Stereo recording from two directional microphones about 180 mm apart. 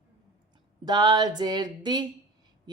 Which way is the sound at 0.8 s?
25° right (ahead or behind).